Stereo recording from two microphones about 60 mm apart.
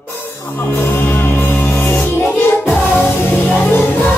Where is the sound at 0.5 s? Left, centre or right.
Left.